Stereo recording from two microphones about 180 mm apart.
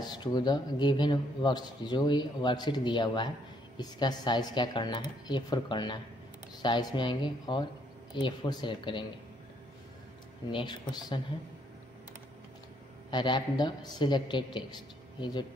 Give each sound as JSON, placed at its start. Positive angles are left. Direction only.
{"t": 0.0, "sound": "speech", "side_deg": 20}
{"t": 10.5, "sound": "speech", "side_deg": 25}
{"t": 13.1, "sound": "speech", "side_deg": 25}